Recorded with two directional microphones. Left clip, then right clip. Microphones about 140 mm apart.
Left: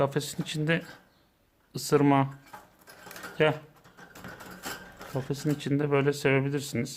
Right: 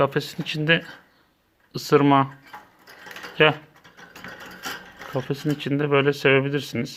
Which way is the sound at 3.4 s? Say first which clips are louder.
Right 7 dB; 20° right (ahead or behind).